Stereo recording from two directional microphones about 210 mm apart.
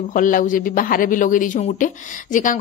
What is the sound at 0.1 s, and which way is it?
A woman's voice, 40° left (ahead or behind).